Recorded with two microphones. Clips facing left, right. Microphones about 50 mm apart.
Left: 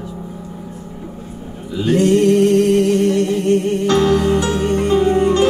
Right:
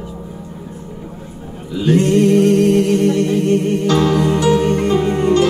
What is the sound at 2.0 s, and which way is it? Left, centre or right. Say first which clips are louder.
Music: left 1 dB; right.